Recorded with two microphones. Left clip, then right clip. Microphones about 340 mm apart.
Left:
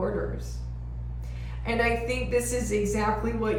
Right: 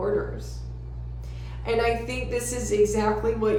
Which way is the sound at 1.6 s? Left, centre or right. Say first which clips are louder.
Right 2 dB; centre.